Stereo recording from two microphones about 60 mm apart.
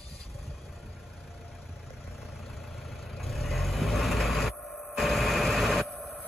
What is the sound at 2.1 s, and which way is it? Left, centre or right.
Vehicle, centre.